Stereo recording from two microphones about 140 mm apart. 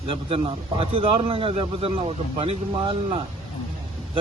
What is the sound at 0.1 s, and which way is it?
A man's voice, 40° right (ahead or behind).